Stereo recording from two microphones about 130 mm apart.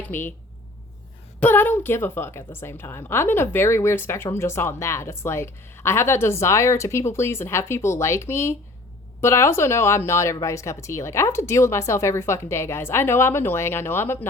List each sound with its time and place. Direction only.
0.1 s speech: 15° left (ahead or behind)
1.4 s a woman's voice: 15° left (ahead or behind)